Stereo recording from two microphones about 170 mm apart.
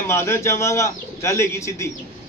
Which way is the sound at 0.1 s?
15° left (ahead or behind).